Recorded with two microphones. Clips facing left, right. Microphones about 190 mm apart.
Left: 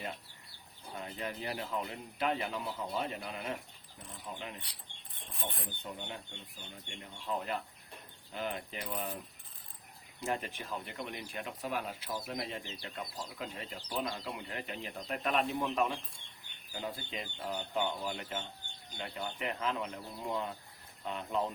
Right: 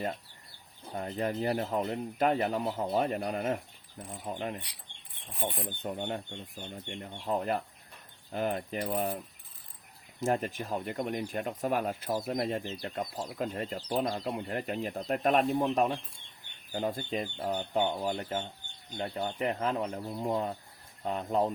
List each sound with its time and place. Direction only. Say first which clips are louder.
0.9 s speech: right 8 dB; 45° right (ahead or behind)
5.3 s rub: right 7 dB; 10° right (ahead or behind)
5.8 s speech: right 10 dB; 55° right (ahead or behind)
10.2 s speech: right 7 dB; 45° right (ahead or behind)